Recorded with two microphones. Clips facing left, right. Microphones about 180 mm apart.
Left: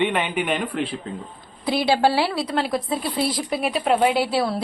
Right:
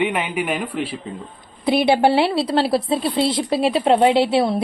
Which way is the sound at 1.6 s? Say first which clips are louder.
Right 4 dB; 20° right (ahead or behind).